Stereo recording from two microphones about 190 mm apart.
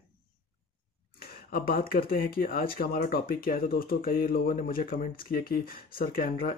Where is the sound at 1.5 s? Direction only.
50° left (ahead or behind).